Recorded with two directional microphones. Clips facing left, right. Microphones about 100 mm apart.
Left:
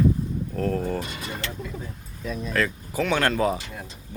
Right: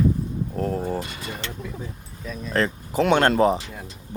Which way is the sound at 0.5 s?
20° right (ahead or behind).